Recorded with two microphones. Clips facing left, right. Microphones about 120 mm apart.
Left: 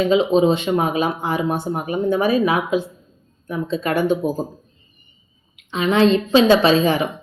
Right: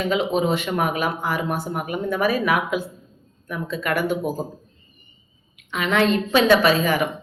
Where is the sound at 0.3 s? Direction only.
20° left (ahead or behind).